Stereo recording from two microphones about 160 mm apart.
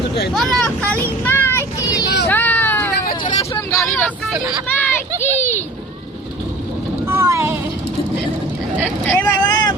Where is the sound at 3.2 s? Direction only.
25° left (ahead or behind).